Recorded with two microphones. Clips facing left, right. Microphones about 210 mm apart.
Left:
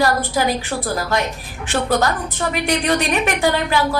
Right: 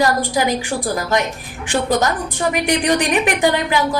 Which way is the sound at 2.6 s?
15° right (ahead or behind).